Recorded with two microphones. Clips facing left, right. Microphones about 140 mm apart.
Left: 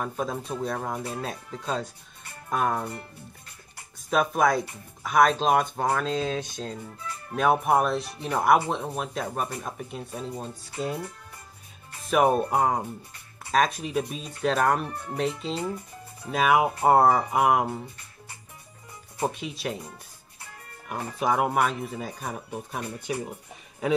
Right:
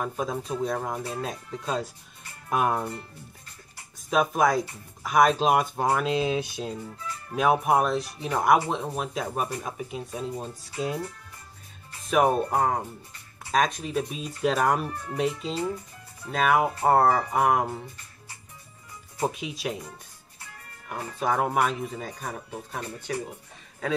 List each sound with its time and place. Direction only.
0.0 s speech: centre (ahead or behind)
4.1 s speech: centre (ahead or behind)
12.1 s speech: 5° left (ahead or behind)
16.3 s speech: 5° left (ahead or behind)
19.1 s speech: centre (ahead or behind)
20.9 s speech: 10° left (ahead or behind)